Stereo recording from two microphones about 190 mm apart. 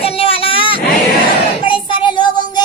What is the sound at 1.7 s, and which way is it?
Child singing, 25° left (ahead or behind).